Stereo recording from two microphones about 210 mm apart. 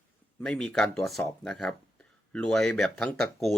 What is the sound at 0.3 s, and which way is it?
Speech, 5° left (ahead or behind).